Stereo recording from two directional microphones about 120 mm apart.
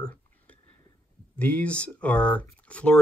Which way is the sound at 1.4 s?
10° left (ahead or behind).